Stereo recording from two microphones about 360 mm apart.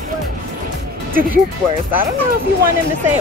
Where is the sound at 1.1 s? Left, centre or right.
Right.